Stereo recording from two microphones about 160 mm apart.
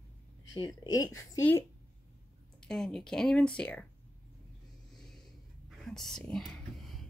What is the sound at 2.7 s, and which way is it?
Speech, 5° left (ahead or behind).